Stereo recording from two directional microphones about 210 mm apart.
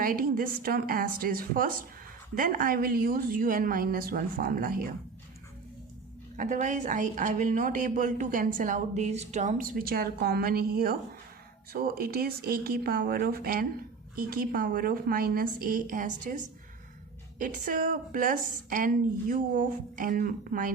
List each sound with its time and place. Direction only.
0.0 s a woman's voice: 40° right (ahead or behind)
6.3 s a woman's voice: 35° right (ahead or behind)